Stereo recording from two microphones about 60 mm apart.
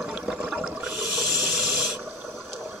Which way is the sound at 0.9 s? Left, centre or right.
Centre.